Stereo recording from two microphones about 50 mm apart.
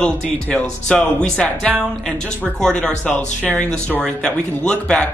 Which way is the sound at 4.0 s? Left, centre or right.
Centre.